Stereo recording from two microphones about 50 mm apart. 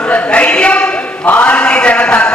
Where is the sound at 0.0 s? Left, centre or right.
Left.